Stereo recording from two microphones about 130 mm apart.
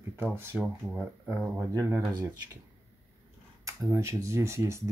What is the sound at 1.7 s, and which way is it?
Speech, 20° right (ahead or behind).